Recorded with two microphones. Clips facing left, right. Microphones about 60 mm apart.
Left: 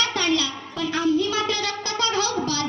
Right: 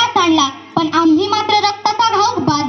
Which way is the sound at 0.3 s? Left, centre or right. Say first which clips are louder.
Right 12 dB; right.